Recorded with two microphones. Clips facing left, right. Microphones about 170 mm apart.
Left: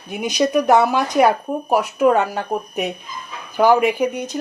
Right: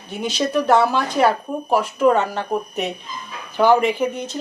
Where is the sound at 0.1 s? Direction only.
15° left (ahead or behind).